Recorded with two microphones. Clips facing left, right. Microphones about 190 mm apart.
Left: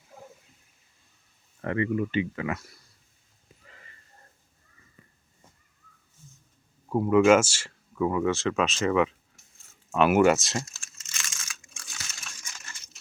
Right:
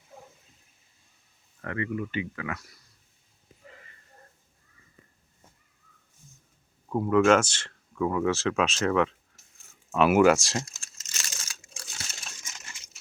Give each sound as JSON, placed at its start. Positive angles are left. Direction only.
{"t": 1.6, "sound": "speech", "side_deg": 25}
{"t": 6.8, "sound": "speech", "side_deg": 5}
{"t": 10.9, "sound": "crumpling", "side_deg": -35}